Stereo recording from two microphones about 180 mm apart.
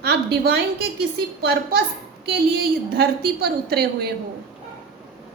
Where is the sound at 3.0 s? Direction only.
60° right (ahead or behind).